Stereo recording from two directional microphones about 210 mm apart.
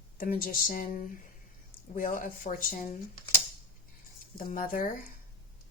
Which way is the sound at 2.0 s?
40° left (ahead or behind).